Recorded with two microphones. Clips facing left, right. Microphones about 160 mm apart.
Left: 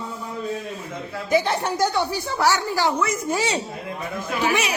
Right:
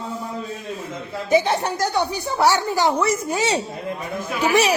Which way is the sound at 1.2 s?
20° right (ahead or behind).